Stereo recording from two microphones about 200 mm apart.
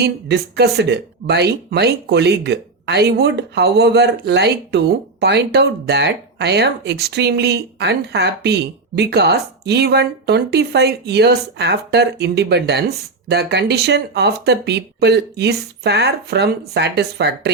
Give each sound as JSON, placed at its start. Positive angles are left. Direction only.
{"t": 0.0, "sound": "speech", "side_deg": -55}